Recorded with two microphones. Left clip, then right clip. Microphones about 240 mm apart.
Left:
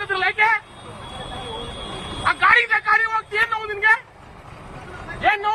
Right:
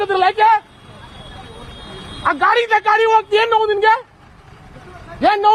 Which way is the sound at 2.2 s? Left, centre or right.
Right.